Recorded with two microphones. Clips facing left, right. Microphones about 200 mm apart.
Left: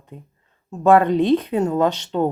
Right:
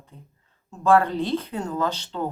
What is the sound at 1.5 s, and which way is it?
Speech, 65° left (ahead or behind).